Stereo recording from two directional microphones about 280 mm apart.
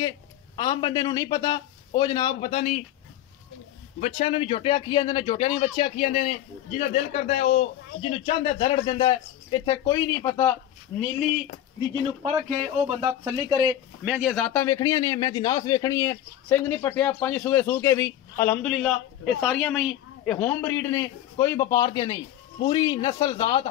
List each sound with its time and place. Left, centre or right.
0.6 s a man's voice: centre
4.0 s a man's voice: left
12.2 s speech: centre
13.0 s speech: centre
14.1 s a man's voice: centre